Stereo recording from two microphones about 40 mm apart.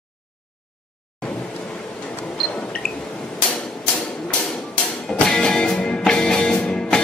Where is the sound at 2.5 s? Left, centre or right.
Left.